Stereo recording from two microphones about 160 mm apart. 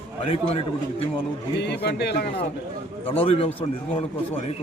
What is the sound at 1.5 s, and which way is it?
Speech, 90° left.